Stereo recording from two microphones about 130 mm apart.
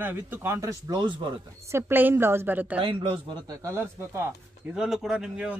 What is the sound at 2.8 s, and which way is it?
Speech, 40° right (ahead or behind).